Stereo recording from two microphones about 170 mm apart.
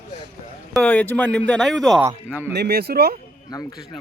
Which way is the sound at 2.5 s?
75° right (ahead or behind).